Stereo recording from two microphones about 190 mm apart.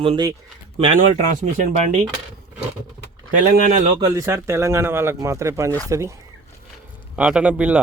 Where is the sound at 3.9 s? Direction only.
20° right (ahead or behind).